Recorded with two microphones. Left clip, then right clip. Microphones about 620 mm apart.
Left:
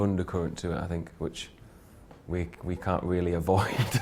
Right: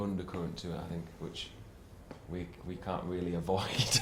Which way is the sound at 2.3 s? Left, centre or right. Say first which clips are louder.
Left 9 dB; left.